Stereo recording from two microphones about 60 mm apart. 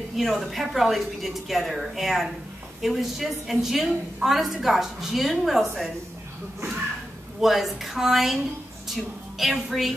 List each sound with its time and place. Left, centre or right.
0.1 s a woman's voice: centre
7.3 s a woman's voice: centre